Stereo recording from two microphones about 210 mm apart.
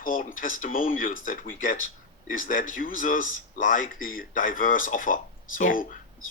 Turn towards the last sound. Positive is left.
turn(degrees=40)  # may be behind; listen again after turning